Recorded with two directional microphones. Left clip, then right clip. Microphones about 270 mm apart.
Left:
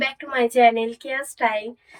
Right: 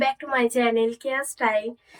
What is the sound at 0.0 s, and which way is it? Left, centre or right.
A woman's voice, centre.